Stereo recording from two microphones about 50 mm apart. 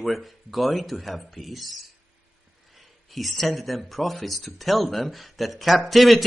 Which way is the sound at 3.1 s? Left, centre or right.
Centre.